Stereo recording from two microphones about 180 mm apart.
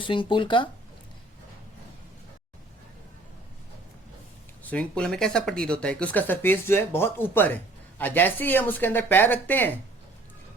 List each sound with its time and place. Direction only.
0.0 s speech: 30° left (ahead or behind)
4.6 s speech: 10° left (ahead or behind)